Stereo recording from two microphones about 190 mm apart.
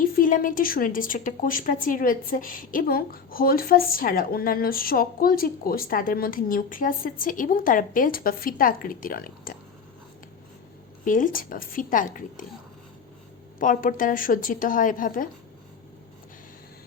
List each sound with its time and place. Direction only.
0.0 s a woman's voice: 45° left (ahead or behind)
11.0 s a woman's voice: 45° left (ahead or behind)
13.6 s a woman's voice: 45° left (ahead or behind)